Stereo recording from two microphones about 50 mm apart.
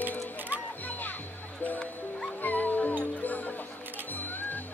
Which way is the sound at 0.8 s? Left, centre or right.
Left.